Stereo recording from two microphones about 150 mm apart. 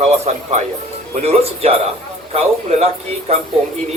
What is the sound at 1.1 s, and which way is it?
A man's voice, 45° right (ahead or behind).